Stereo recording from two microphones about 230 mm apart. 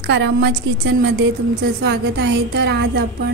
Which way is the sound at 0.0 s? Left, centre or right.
Right.